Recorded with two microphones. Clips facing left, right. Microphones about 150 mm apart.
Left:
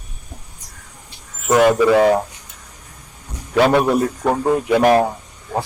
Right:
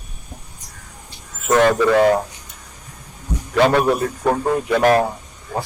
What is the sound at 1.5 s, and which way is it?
Speech, 10° left (ahead or behind).